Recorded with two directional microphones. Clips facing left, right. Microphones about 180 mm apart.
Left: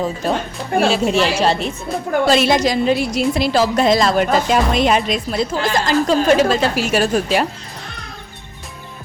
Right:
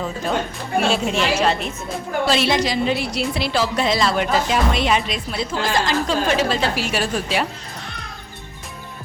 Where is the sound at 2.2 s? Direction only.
45° left (ahead or behind).